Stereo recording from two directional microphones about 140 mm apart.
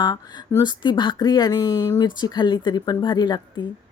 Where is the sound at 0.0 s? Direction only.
30° left (ahead or behind).